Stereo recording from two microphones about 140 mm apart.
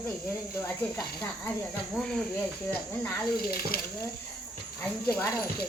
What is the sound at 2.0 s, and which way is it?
Speech, 5° left (ahead or behind).